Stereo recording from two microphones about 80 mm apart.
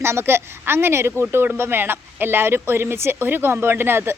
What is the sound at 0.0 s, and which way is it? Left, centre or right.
Speech, right.